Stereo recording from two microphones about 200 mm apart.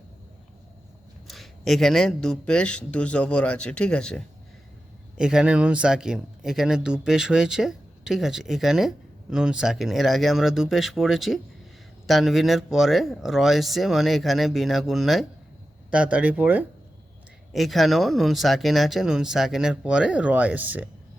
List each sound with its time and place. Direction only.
1.3 s speech: centre (ahead or behind)